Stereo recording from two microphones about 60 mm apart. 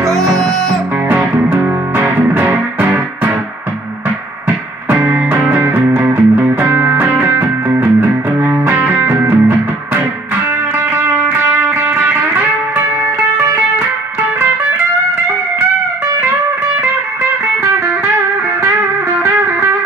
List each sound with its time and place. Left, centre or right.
0.1 s music: centre
1.1 s music: right
4.8 s music: right
11.0 s music: right
16.8 s music: right